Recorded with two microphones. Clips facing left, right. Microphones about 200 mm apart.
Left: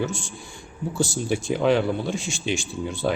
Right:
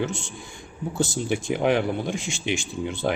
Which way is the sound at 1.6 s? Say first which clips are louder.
Left 2 dB; 55° right (ahead or behind).